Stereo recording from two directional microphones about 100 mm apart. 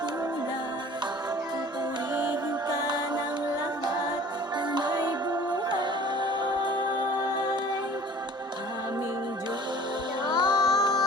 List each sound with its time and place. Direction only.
2.6 s music: 45° right (ahead or behind)
4.7 s music: 45° right (ahead or behind)
10.2 s music: 50° right (ahead or behind)
10.6 s music: centre (ahead or behind)